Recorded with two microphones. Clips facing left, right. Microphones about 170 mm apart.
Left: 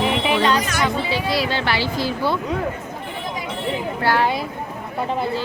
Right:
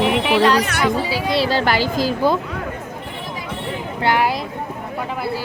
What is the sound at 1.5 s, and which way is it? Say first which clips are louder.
Speech: right 4 dB; 40° right (ahead or behind).